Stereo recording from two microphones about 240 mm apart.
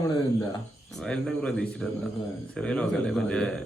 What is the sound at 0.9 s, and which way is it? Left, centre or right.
Speech, centre.